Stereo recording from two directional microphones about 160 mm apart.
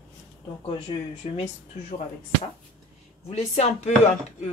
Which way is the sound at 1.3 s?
45° left (ahead or behind).